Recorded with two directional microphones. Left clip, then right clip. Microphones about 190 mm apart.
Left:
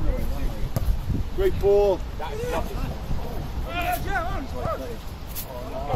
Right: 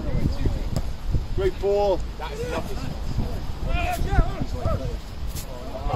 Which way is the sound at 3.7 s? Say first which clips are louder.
Left 2 dB; 15° right (ahead or behind).